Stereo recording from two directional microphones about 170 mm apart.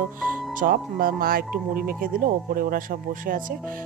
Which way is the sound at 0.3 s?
55° right (ahead or behind).